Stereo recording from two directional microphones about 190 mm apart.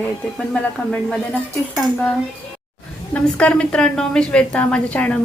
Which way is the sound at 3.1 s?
5° left (ahead or behind).